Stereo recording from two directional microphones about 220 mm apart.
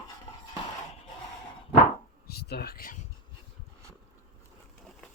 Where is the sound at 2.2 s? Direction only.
45° left (ahead or behind).